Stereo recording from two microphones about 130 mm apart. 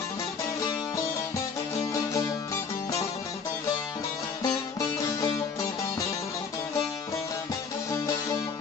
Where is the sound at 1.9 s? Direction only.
25° left (ahead or behind).